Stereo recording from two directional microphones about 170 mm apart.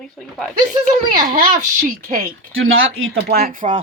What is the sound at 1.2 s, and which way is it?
Speech, 60° right (ahead or behind).